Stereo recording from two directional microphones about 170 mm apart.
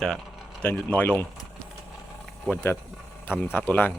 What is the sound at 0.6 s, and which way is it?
Speech, 10° left (ahead or behind).